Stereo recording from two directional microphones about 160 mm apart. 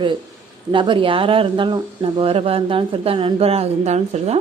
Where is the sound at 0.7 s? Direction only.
30° right (ahead or behind).